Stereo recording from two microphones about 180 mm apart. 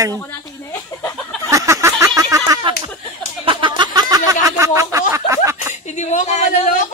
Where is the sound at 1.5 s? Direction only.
15° right (ahead or behind).